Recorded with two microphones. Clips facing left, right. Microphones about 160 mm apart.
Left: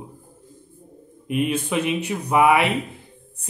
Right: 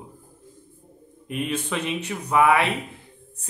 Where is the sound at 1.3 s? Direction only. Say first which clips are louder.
Left 5 dB; 10° left (ahead or behind).